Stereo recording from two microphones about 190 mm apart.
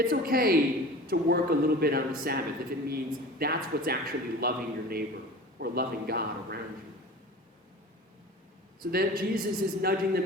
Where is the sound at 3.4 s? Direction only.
55° right (ahead or behind).